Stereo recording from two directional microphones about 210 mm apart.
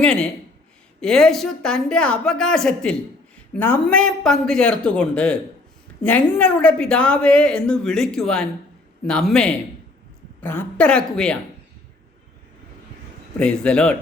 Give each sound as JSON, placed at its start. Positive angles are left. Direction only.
{"t": 0.0, "sound": "a woman's voice", "side_deg": 5}
{"t": 13.4, "sound": "a woman's voice", "side_deg": 5}